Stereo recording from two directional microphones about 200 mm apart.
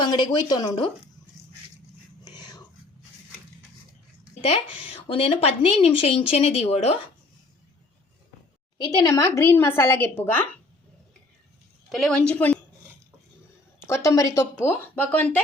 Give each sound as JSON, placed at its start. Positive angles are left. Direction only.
{"t": 0.0, "sound": "speech", "side_deg": 20}
{"t": 2.2, "sound": "whispering", "side_deg": 20}
{"t": 4.4, "sound": "speech", "side_deg": 25}
{"t": 9.0, "sound": "a woman's voice", "side_deg": 15}
{"t": 11.9, "sound": "a woman's voice", "side_deg": 0}
{"t": 13.7, "sound": "a woman's voice", "side_deg": 15}